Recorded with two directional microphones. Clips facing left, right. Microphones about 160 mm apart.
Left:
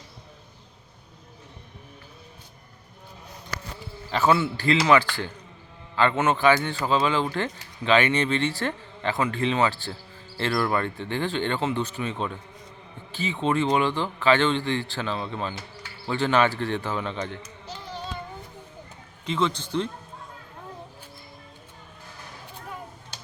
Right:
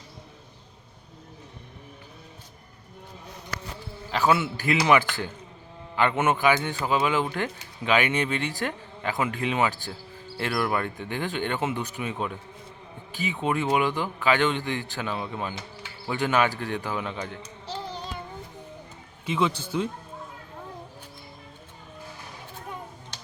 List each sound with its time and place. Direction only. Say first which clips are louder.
4.1 s a man's voice: left 1 dB; centre (ahead or behind)
4.4 s speech: left 2 dB; 15° right (ahead or behind)
17.7 s child singing: right 5 dB; 30° right (ahead or behind)
19.2 s speech: even; 10° right (ahead or behind)